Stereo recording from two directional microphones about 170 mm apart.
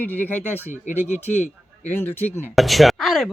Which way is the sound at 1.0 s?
45° left (ahead or behind).